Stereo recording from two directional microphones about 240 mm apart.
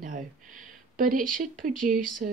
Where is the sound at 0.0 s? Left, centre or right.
Right.